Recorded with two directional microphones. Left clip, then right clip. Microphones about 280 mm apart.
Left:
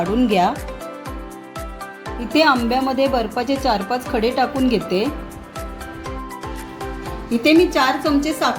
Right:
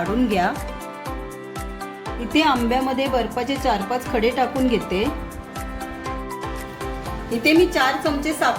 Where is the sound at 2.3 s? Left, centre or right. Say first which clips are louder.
Left 3 dB; centre.